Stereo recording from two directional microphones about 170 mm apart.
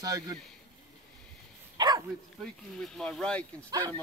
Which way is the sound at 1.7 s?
25° right (ahead or behind).